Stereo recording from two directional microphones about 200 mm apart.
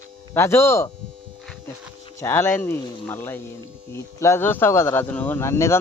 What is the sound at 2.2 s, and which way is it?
Speech, 10° left (ahead or behind).